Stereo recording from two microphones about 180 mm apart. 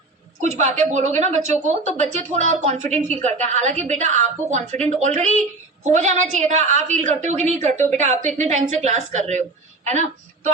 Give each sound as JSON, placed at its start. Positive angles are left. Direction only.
{"t": 0.6, "sound": "a woman's voice", "side_deg": -40}